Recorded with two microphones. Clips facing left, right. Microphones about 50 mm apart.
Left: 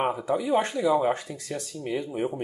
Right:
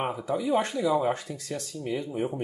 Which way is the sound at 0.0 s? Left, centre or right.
Centre.